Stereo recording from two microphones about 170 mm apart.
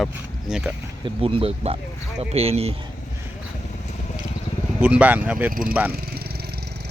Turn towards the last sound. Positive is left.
turn(degrees=-65)  # may be behind; listen again after turning